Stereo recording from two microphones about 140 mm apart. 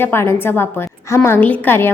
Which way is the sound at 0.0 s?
15° left (ahead or behind).